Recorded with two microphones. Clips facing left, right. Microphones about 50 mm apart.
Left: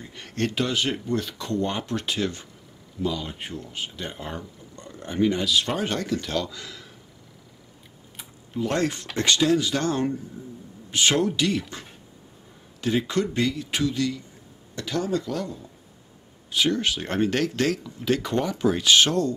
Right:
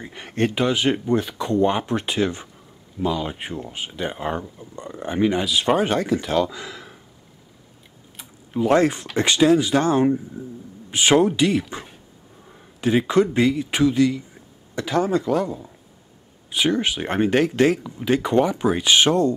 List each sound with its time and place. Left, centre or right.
0.0 s speech: right
8.2 s tick-tock: centre
8.5 s speech: right
12.8 s speech: right